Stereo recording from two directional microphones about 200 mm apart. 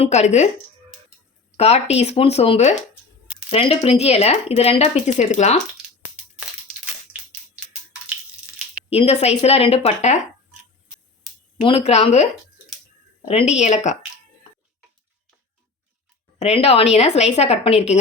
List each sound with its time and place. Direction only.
0.0 s speech: 35° left (ahead or behind)
1.5 s speech: 30° left (ahead or behind)
8.9 s speech: 30° left (ahead or behind)
11.6 s speech: 30° left (ahead or behind)
16.4 s speech: 30° left (ahead or behind)